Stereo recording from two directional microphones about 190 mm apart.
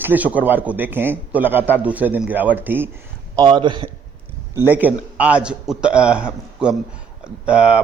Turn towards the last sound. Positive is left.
turn(degrees=-5)  # may be behind; listen again after turning